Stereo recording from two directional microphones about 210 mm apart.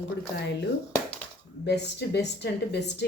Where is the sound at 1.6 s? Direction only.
55° left (ahead or behind).